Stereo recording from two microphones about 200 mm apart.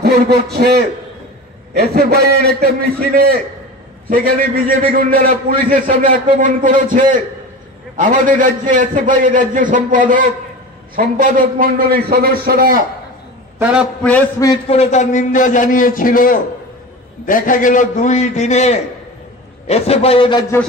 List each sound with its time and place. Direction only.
0.0 s a man's voice: 55° right (ahead or behind)
13.6 s a man's voice: 5° right (ahead or behind)
14.0 s a man's voice: 10° left (ahead or behind)
14.7 s a man's voice: 35° left (ahead or behind)